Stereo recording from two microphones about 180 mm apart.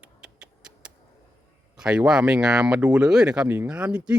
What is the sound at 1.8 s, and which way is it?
Speech, 5° right (ahead or behind).